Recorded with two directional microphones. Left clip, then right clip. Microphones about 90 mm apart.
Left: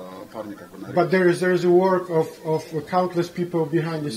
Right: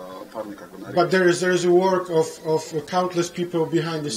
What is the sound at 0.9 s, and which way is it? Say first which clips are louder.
Speech: right 1 dB; centre (ahead or behind).